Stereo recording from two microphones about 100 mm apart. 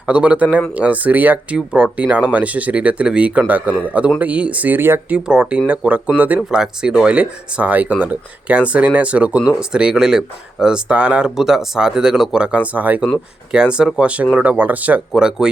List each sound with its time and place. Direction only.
0.0 s speech: 15° right (ahead or behind)
5.1 s speech: 10° right (ahead or behind)